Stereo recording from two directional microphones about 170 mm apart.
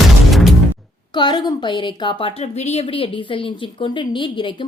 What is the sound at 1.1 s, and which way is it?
A woman's voice, 25° left (ahead or behind).